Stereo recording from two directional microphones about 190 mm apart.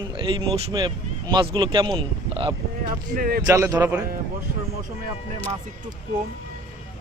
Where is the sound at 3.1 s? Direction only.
50° right (ahead or behind).